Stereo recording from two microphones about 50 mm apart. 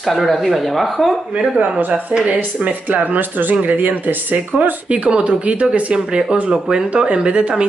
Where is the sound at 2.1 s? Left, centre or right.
Right.